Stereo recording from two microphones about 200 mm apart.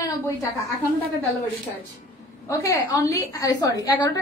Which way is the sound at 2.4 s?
15° left (ahead or behind).